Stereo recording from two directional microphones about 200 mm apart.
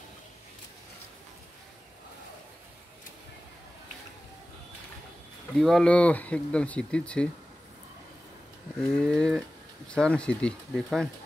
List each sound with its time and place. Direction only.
5.6 s speech: centre (ahead or behind)
8.8 s speech: 5° left (ahead or behind)